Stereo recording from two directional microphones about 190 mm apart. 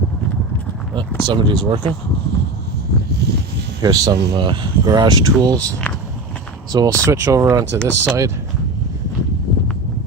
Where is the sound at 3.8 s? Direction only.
20° right (ahead or behind).